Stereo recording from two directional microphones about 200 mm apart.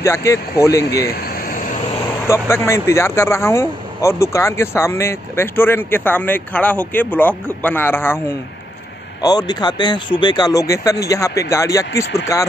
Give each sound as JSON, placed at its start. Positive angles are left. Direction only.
{"t": 0.0, "sound": "speech", "side_deg": 15}
{"t": 1.0, "sound": "air conditioning", "side_deg": 50}
{"t": 2.2, "sound": "speech", "side_deg": 15}
{"t": 9.2, "sound": "speech", "side_deg": 20}